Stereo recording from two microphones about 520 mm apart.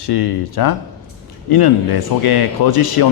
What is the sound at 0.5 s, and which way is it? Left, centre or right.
A man's voice, left.